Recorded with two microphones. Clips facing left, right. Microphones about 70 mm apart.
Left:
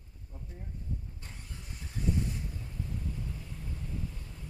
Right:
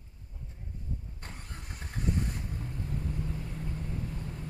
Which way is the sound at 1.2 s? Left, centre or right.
Right.